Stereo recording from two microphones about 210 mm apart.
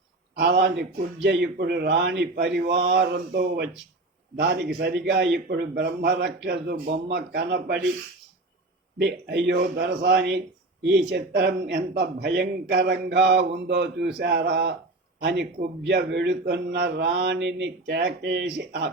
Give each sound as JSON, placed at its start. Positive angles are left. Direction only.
{"t": 0.3, "sound": "speech", "side_deg": -50}
{"t": 9.0, "sound": "a man's voice", "side_deg": -55}